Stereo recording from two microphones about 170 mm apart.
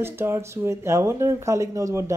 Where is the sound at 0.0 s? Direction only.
15° right (ahead or behind).